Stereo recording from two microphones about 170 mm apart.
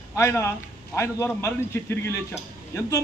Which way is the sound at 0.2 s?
15° left (ahead or behind).